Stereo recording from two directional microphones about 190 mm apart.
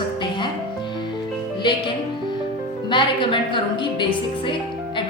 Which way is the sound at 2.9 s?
25° left (ahead or behind).